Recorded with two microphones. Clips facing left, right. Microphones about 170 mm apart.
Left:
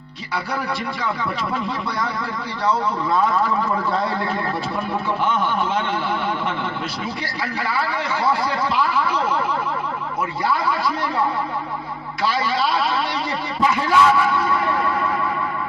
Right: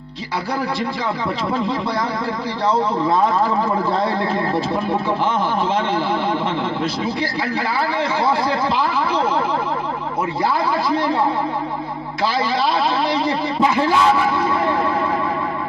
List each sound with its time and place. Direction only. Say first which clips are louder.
2.6 s speech: right 3 dB; 25° right (ahead or behind)
8.2 s speech: right 1 dB; 25° right (ahead or behind)
13.6 s speech: even; 25° right (ahead or behind)